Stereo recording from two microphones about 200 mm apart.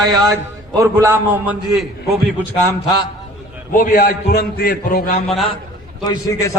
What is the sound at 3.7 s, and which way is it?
A man's voice, 45° left (ahead or behind).